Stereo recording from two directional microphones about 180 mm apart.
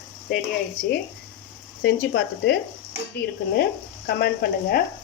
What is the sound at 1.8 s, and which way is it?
Speech, 70° left (ahead or behind).